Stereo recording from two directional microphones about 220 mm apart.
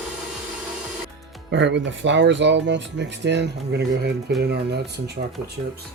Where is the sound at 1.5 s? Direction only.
55° right (ahead or behind).